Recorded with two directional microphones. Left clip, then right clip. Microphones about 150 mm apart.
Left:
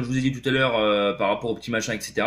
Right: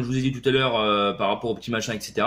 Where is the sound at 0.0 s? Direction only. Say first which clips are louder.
Right 1 dB; 40° right (ahead or behind).